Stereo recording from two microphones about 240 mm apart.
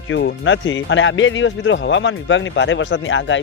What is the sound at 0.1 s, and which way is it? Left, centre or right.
Speech, left.